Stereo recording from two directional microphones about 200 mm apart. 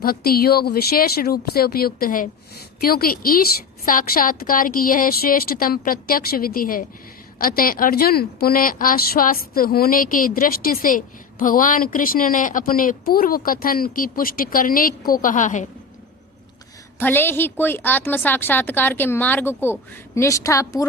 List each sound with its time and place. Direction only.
0.0 s a woman's voice: 50° left (ahead or behind)
17.0 s a woman's voice: 10° left (ahead or behind)